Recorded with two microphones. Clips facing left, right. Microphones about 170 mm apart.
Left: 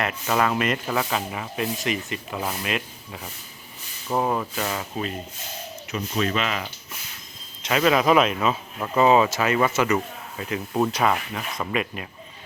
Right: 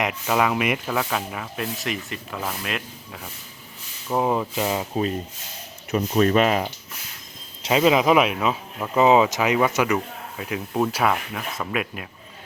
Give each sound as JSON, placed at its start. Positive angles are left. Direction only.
{"t": 0.0, "sound": "speech", "side_deg": -10}
{"t": 0.9, "sound": "speech", "side_deg": 0}
{"t": 4.1, "sound": "speech", "side_deg": -10}
{"t": 5.9, "sound": "speech", "side_deg": -45}
{"t": 7.8, "sound": "speech", "side_deg": -15}